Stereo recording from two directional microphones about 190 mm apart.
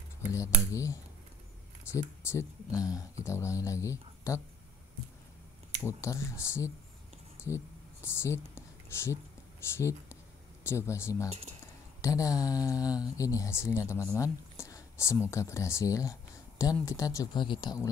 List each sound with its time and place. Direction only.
0.3 s speech: 15° left (ahead or behind)
2.7 s speech: 5° right (ahead or behind)
3.3 s speech: 15° left (ahead or behind)
5.9 s speech: 15° left (ahead or behind)
7.4 s a sound: 15° left (ahead or behind)
9.8 s speech: 15° left (ahead or behind)
12.0 s a sound: 15° left (ahead or behind)
13.2 s speech: 15° left (ahead or behind)
16.8 s a sound: 15° left (ahead or behind)